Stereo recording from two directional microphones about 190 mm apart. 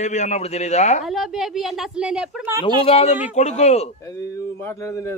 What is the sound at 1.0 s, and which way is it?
Speech, centre (ahead or behind).